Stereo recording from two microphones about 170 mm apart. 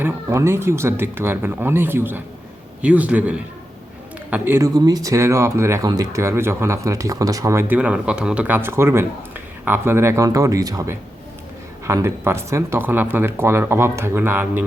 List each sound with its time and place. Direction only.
0.0 s speech: 15° right (ahead or behind)